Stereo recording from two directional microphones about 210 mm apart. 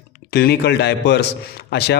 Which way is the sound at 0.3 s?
50° left (ahead or behind).